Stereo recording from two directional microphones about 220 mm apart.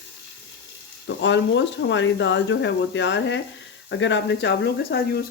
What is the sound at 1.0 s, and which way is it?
Speech, 55° left (ahead or behind).